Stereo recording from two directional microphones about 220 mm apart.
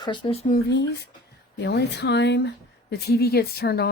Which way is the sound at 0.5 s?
50° left (ahead or behind).